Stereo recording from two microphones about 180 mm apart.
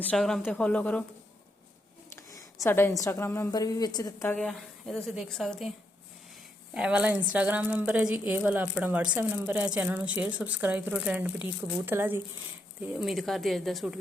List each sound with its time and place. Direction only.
0.0 s speech: 5° left (ahead or behind)
2.1 s a sound: 15° left (ahead or behind)
3.0 s a woman's voice: 15° left (ahead or behind)
4.4 s a woman's voice: 5° left (ahead or behind)
6.7 s a woman's voice: 5° right (ahead or behind)
12.9 s a woman's voice: centre (ahead or behind)